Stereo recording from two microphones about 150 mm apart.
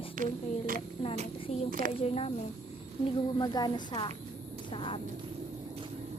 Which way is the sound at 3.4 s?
30° left (ahead or behind).